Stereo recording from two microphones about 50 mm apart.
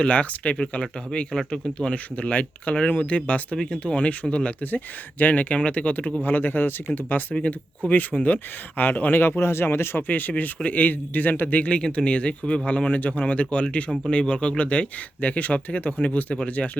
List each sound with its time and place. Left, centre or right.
0.0 s speech: left
6.2 s a man's voice: left
9.4 s speech: left
10.1 s a man's voice: left
11.6 s speech: left